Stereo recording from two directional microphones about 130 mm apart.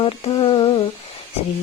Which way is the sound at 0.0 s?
40° left (ahead or behind).